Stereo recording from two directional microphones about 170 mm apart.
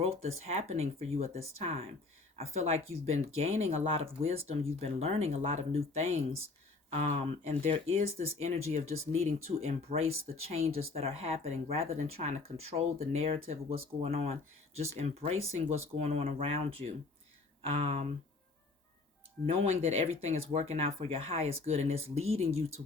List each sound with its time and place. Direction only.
0.0 s speech: 40° right (ahead or behind)
19.5 s speech: 40° right (ahead or behind)